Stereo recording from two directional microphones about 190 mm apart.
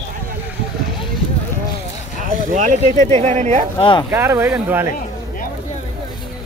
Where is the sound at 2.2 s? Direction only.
40° right (ahead or behind).